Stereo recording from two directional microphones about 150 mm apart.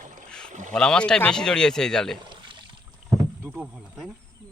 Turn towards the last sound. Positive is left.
turn(degrees=-5)  # may be behind; listen again after turning